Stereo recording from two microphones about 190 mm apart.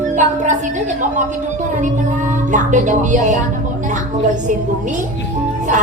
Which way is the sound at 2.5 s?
40° right (ahead or behind).